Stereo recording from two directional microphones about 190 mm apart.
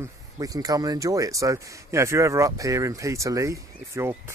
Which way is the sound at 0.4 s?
20° right (ahead or behind).